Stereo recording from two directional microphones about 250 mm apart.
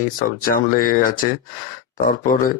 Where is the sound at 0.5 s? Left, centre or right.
Left.